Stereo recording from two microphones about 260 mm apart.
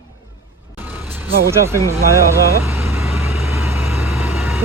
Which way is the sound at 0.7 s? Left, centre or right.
Centre.